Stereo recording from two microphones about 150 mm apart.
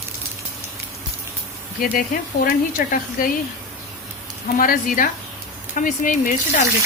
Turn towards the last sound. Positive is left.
turn(degrees=55)  # may be behind; listen again after turning